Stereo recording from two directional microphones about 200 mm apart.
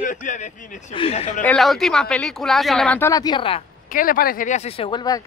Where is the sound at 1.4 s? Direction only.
Centre (ahead or behind).